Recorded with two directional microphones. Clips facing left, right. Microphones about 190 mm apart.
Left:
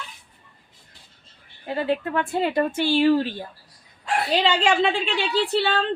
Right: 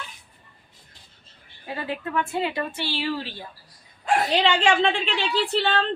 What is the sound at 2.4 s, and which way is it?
Speech, 45° left (ahead or behind).